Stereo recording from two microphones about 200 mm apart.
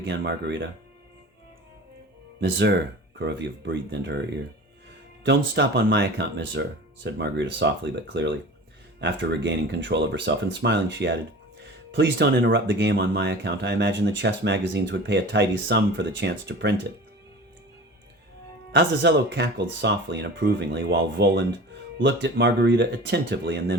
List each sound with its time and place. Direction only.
0.0 s speech: 55° right (ahead or behind)
2.4 s speech: 55° right (ahead or behind)
5.2 s speech: 60° right (ahead or behind)
18.7 s speech: 60° right (ahead or behind)